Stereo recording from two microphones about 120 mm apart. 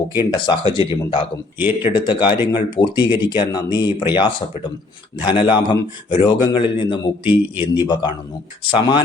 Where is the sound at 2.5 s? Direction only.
40° left (ahead or behind).